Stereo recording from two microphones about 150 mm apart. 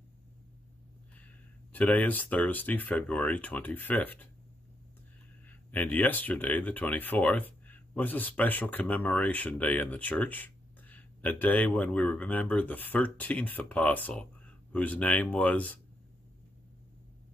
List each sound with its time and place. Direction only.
1.1 s speech: 10° left (ahead or behind)
5.7 s speech: 10° left (ahead or behind)